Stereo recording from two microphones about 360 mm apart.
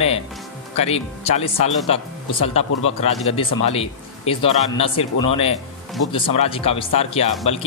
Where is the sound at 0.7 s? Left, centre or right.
Centre.